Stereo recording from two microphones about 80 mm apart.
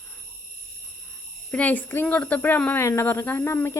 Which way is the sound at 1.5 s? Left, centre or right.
Centre.